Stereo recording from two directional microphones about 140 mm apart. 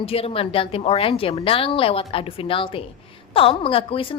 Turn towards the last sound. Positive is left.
turn(degrees=40)  # may be behind; listen again after turning